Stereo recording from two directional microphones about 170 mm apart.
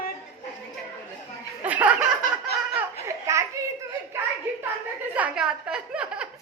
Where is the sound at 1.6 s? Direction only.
10° right (ahead or behind).